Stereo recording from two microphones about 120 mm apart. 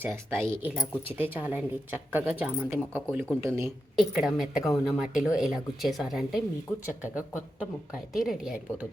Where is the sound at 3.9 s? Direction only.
Centre (ahead or behind).